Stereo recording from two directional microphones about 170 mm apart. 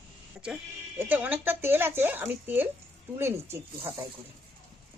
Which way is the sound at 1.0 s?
10° right (ahead or behind).